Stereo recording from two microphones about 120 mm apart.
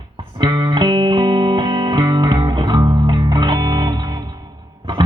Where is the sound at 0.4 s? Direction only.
40° right (ahead or behind).